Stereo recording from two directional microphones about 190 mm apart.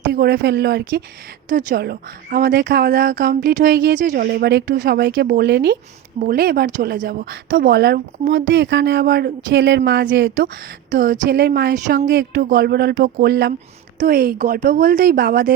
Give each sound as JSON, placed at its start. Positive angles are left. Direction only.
{"t": 0.1, "sound": "speech", "side_deg": -65}
{"t": 1.5, "sound": "speech", "side_deg": -45}
{"t": 4.1, "sound": "speech", "side_deg": -55}
{"t": 4.9, "sound": "a woman's voice", "side_deg": -70}
{"t": 8.4, "sound": "speech", "side_deg": -80}
{"t": 9.5, "sound": "a woman's voice", "side_deg": -75}
{"t": 10.9, "sound": "speech", "side_deg": -45}
{"t": 11.3, "sound": "speech", "side_deg": -65}
{"t": 11.7, "sound": "speech", "side_deg": -40}
{"t": 12.0, "sound": "a woman's voice", "side_deg": -75}
{"t": 12.5, "sound": "speech", "side_deg": -60}
{"t": 13.2, "sound": "a woman's voice", "side_deg": -70}
{"t": 14.0, "sound": "speech", "side_deg": -50}